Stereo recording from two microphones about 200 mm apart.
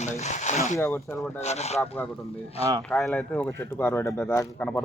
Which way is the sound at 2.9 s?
5° left (ahead or behind).